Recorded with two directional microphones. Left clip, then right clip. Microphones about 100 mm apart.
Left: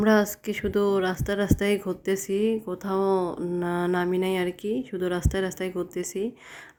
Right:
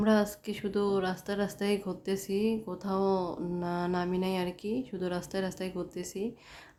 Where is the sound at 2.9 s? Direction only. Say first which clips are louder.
Left 5 dB; 15° left (ahead or behind); by 6.3 s 40° left (ahead or behind).